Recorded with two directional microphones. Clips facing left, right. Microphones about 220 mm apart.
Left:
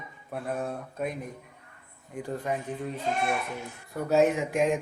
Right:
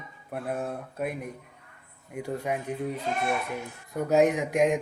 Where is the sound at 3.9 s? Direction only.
15° right (ahead or behind).